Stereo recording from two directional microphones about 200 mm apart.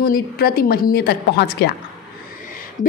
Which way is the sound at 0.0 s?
50° left (ahead or behind).